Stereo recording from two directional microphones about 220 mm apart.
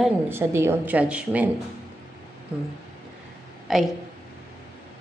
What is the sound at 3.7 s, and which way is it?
Speech, centre (ahead or behind).